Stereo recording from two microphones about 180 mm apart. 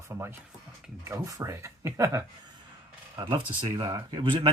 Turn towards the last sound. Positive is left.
turn(degrees=-25)  # may be behind; listen again after turning